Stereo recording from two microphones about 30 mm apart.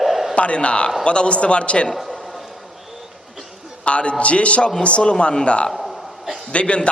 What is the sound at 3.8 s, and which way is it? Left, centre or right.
A man's voice, left.